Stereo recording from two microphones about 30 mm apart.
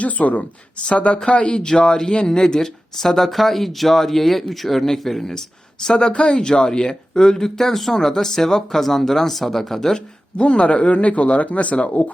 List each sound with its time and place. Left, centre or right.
0.0 s speech: left
0.9 s speech: left
1.6 s speech: left
5.8 s speech: left
7.6 s speech: centre
10.3 s speech: left